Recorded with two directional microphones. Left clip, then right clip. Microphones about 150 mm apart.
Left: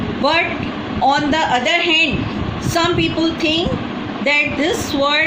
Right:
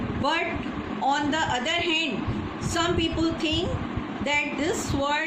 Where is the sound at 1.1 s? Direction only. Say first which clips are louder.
Left 9 dB; 50° left (ahead or behind).